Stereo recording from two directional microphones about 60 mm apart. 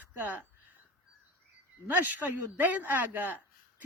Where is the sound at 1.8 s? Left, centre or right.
Right.